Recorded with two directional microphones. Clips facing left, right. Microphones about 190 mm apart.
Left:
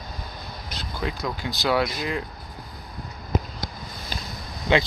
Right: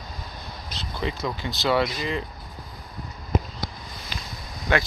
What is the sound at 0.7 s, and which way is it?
Speech, centre (ahead or behind).